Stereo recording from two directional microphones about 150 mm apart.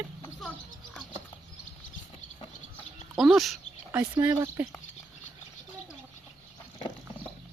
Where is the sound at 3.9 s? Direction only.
10° right (ahead or behind).